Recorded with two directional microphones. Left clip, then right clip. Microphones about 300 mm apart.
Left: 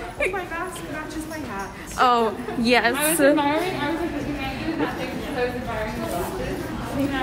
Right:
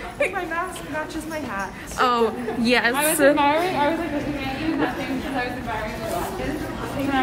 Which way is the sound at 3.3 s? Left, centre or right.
Right.